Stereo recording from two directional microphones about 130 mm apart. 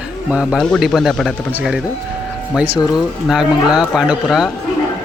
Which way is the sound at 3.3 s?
5° right (ahead or behind).